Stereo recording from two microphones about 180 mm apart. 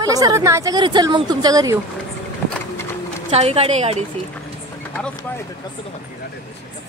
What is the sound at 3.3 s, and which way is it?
Speech, 35° right (ahead or behind).